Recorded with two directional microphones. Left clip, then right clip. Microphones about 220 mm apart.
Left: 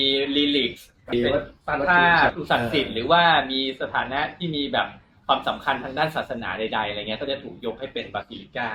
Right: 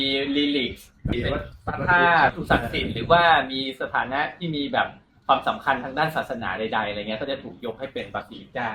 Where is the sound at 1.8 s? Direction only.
15° right (ahead or behind).